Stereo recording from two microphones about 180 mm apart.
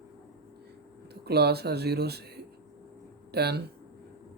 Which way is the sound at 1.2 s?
65° right (ahead or behind).